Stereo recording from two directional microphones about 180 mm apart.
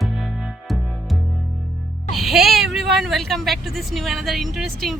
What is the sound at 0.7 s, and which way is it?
Music, centre (ahead or behind).